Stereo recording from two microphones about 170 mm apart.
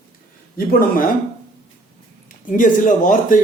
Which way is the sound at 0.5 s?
60° left (ahead or behind).